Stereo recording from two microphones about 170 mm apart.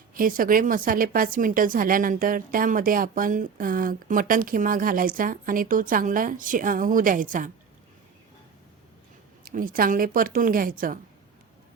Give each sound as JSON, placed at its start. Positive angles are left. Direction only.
{"t": 0.1, "sound": "a woman's voice", "side_deg": -55}
{"t": 9.4, "sound": "a woman's voice", "side_deg": -55}